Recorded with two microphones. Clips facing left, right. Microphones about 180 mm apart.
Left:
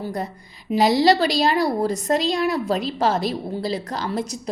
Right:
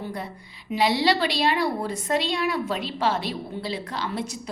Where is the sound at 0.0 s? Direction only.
40° left (ahead or behind).